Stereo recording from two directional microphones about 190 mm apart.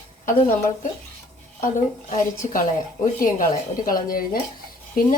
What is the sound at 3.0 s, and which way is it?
A woman's voice, 45° left (ahead or behind).